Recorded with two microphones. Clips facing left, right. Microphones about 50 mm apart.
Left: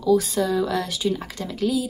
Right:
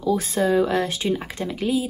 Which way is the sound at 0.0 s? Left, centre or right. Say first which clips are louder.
Left 1 dB; right.